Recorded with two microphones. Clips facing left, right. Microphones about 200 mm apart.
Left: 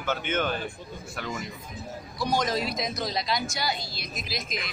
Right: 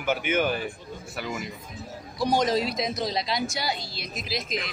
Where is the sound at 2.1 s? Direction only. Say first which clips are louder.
Right 4 dB; 30° right (ahead or behind).